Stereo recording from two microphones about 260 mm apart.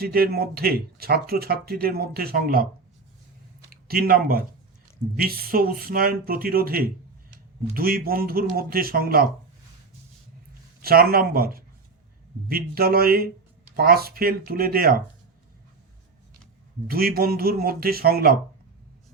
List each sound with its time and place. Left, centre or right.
0.0 s speech: right
3.7 s speech: right
10.8 s speech: right
16.8 s speech: right